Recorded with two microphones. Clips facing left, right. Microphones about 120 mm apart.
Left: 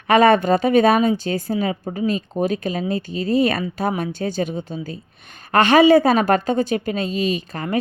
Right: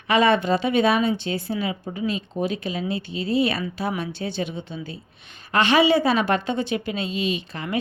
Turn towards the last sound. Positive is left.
turn(degrees=45)  # may be behind; listen again after turning